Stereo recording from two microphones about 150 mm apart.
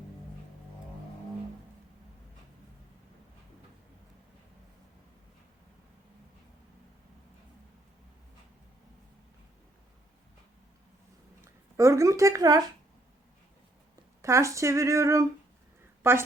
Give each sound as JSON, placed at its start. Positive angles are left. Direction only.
{"t": 11.8, "sound": "speech", "side_deg": -20}
{"t": 14.2, "sound": "a woman's voice", "side_deg": -20}